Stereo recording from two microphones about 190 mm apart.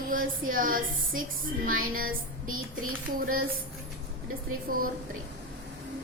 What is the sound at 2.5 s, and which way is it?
Music, 90° right.